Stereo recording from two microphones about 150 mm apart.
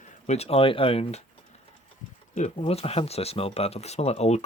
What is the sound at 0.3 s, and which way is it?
Speech, 45° left (ahead or behind).